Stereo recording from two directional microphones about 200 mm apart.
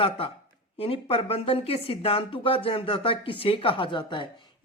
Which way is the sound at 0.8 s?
30° left (ahead or behind).